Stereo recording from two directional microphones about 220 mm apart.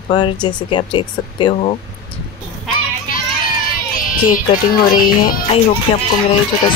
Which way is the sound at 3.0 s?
40° left (ahead or behind).